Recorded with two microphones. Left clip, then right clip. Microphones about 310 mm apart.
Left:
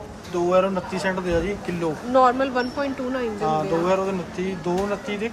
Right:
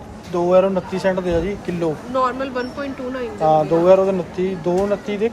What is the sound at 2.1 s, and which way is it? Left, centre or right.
Speech, left.